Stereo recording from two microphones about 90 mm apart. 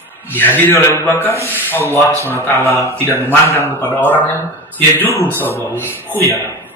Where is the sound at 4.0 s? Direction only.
20° left (ahead or behind).